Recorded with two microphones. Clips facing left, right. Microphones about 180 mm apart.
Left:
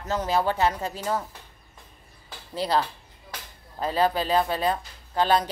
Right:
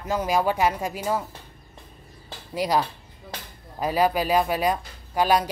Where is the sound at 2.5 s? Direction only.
10° right (ahead or behind).